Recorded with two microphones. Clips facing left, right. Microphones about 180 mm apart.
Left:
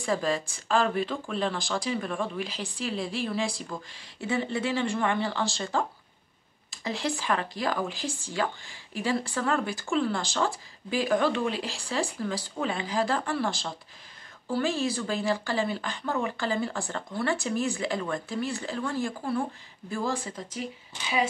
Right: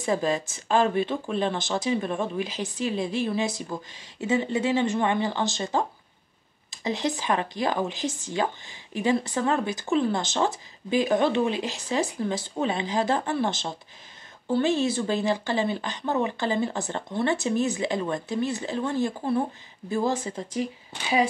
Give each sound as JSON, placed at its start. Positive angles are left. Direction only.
{"t": 0.0, "sound": "speech", "side_deg": -20}